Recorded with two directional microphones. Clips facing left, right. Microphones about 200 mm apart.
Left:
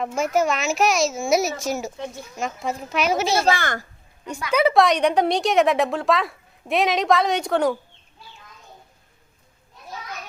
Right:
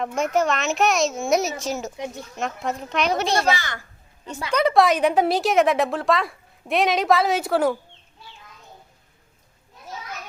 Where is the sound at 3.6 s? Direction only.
50° left (ahead or behind).